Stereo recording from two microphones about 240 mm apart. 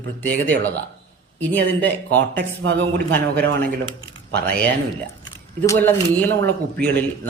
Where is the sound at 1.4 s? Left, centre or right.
Centre.